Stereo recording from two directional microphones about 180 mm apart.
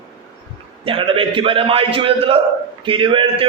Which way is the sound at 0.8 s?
30° right (ahead or behind).